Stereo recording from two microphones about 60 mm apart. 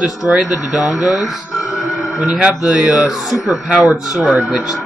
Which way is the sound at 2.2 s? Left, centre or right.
Centre.